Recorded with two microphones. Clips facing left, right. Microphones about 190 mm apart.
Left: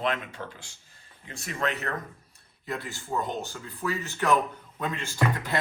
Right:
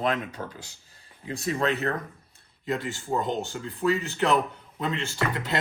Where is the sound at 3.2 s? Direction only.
20° right (ahead or behind).